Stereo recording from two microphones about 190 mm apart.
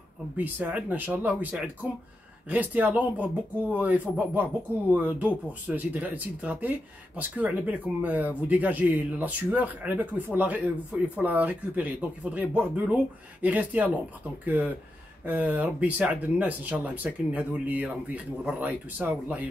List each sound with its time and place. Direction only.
0.4 s speech: 10° right (ahead or behind)